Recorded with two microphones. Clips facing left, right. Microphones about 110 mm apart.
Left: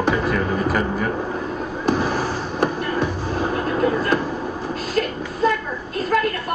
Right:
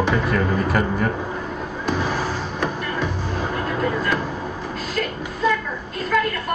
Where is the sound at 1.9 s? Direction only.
40° left (ahead or behind).